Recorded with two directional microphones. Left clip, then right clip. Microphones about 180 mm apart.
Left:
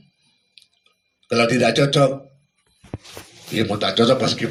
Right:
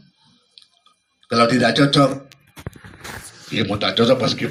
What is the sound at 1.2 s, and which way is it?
Speech, 60° left (ahead or behind).